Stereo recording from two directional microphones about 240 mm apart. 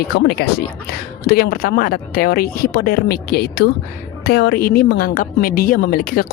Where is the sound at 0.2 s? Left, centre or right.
Left.